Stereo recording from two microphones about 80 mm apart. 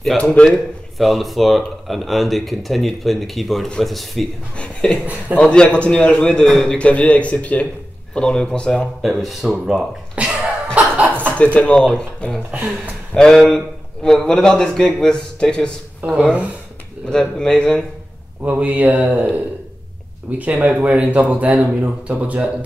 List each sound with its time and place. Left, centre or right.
0.2 s a man's voice: centre
0.5 s a man's voice: centre
9.0 s speech: centre
10.1 s cough: centre
11.3 s a man's voice: centre
16.0 s speech: centre
17.1 s a man's voice: centre
18.4 s speech: centre